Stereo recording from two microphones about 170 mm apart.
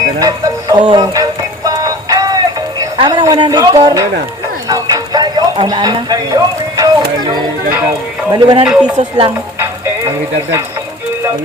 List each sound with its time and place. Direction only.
0.2 s music: 20° right (ahead or behind)
8.3 s speech: 25° right (ahead or behind)
8.6 s speech: 5° right (ahead or behind)
9.0 s speech: 35° right (ahead or behind)